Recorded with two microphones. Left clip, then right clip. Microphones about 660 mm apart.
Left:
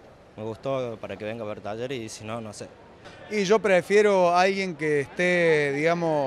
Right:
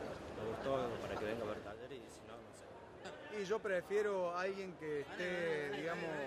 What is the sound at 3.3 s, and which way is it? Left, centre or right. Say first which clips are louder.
A man's voice: left 18 dB; left.